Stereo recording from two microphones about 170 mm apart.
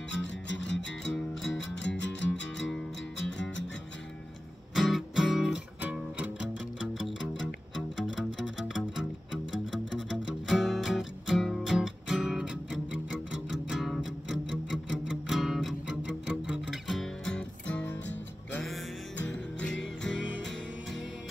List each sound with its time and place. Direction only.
0.1 s music: 90° left
4.7 s music: centre (ahead or behind)
8.5 s music: 5° right (ahead or behind)
10.0 s music: 90° left
10.5 s music: centre (ahead or behind)
20.2 s music: 90° left